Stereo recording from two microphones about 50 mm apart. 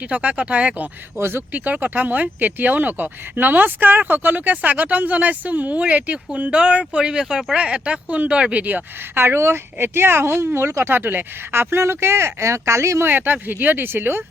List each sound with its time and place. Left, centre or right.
0.1 s speech: right
1.2 s speech: right
1.5 s speech: right
6.5 s speech: right
9.1 s speech: right
10.9 s speech: right
13.1 s speech: right